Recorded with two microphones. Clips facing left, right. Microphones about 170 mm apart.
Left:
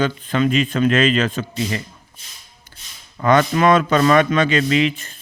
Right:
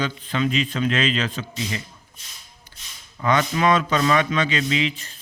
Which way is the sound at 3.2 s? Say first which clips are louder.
Left 5 dB; 55° left (ahead or behind).